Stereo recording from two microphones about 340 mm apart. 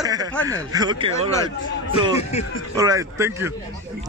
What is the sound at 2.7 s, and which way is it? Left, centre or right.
Speech, centre.